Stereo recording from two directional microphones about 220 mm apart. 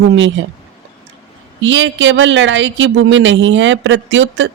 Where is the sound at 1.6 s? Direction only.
55° right (ahead or behind).